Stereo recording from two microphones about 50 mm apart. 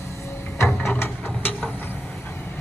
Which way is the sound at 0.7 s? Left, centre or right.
Centre.